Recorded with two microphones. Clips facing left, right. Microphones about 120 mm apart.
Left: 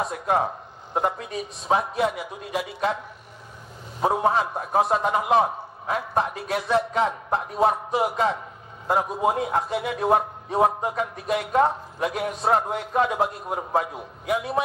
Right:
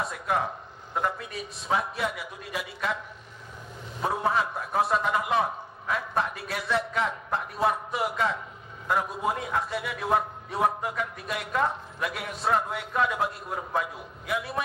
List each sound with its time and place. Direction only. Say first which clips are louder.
0.0 s a man's voice: left 5 dB; 30° left (ahead or behind)
1.7 s a man's voice: left 6 dB; 30° left (ahead or behind)
4.0 s a man's voice: left 5 dB; 30° left (ahead or behind)